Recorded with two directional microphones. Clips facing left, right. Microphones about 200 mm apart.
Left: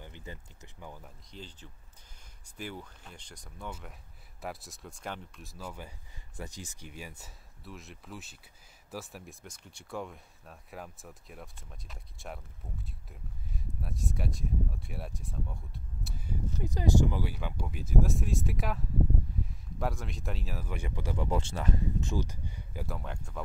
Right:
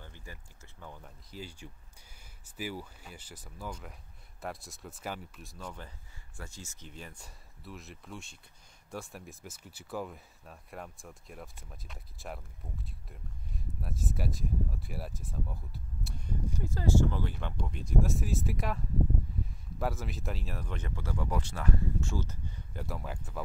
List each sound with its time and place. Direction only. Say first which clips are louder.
0.0 s speech: left 4 dB; 20° left (ahead or behind)
1.3 s speech: right 4 dB; 10° right (ahead or behind)
16.6 s speech: left 1 dB; 15° left (ahead or behind); by 23.4 s 5° right (ahead or behind)